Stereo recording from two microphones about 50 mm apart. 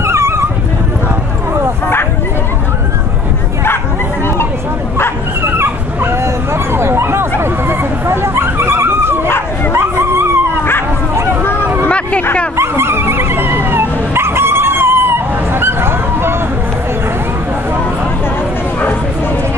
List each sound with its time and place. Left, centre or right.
0.0 s dog: right
5.6 s dog: right
12.5 s dog: right